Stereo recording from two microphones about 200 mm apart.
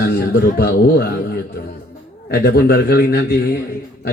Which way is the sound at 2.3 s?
50° left (ahead or behind).